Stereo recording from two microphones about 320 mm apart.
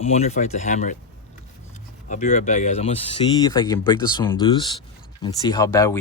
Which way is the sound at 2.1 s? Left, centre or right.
Left.